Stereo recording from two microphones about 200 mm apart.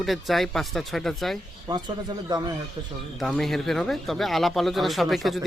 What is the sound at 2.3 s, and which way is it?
Speech, 20° right (ahead or behind).